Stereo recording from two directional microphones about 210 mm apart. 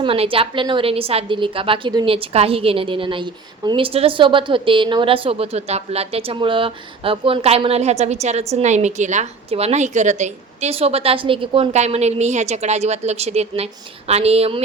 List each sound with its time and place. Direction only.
0.0 s a woman's voice: 25° right (ahead or behind)